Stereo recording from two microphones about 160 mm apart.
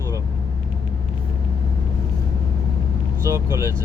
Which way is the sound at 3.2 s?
15° right (ahead or behind).